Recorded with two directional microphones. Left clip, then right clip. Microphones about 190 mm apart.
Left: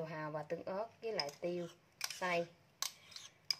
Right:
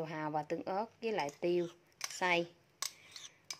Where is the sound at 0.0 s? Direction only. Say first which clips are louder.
Right 5 dB; 40° right (ahead or behind).